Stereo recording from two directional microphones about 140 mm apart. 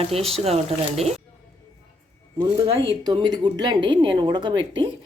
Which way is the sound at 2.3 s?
35° right (ahead or behind).